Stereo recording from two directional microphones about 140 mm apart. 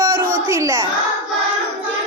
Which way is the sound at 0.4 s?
20° right (ahead or behind).